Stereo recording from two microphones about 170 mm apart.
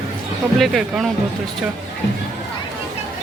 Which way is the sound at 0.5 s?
Centre (ahead or behind).